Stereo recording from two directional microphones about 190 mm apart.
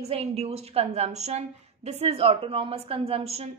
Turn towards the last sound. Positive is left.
turn(degrees=-30)  # may be behind; listen again after turning